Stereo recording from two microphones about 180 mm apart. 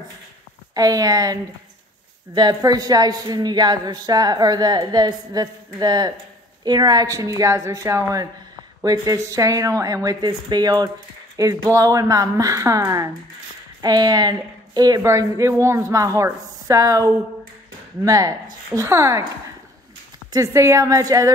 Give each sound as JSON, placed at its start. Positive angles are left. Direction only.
{"t": 0.7, "sound": "a woman's voice", "side_deg": -20}
{"t": 20.3, "sound": "a woman's voice", "side_deg": -15}